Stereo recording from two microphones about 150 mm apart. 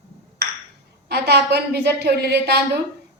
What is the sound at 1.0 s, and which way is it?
A woman's voice, 90° right.